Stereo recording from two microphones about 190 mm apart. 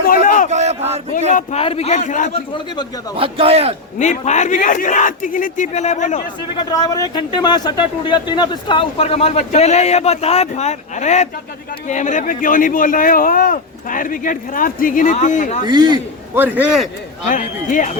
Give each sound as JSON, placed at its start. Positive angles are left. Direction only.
{"t": 0.0, "sound": "a sound", "side_deg": 45}
{"t": 0.5, "sound": "a sound", "side_deg": -35}
{"t": 1.3, "sound": "a man's voice", "side_deg": 40}
{"t": 3.2, "sound": "a man's voice", "side_deg": -30}
{"t": 3.9, "sound": "speech", "side_deg": 40}
{"t": 6.6, "sound": "speech", "side_deg": 20}
{"t": 15.6, "sound": "a man's voice", "side_deg": -25}
{"t": 16.4, "sound": "a man's voice", "side_deg": -5}
{"t": 17.2, "sound": "speech", "side_deg": 40}